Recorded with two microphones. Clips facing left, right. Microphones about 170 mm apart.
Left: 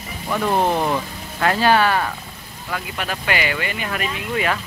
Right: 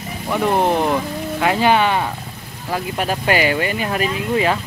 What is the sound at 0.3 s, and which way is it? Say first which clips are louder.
Speech: right 2 dB; 15° right (ahead or behind).